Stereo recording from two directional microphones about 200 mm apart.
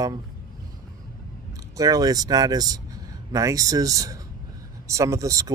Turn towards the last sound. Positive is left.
turn(degrees=-15)  # may be behind; listen again after turning